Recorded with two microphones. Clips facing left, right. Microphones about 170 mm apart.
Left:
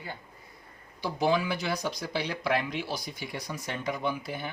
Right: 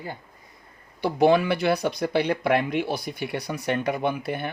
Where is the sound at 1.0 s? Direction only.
60° right (ahead or behind).